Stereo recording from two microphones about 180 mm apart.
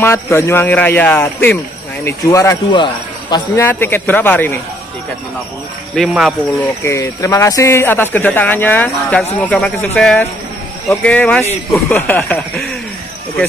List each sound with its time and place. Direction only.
0.0 s speech: 15° left (ahead or behind)
3.6 s speech: 10° left (ahead or behind)
5.9 s speech: centre (ahead or behind)
6.8 s speech: 15° left (ahead or behind)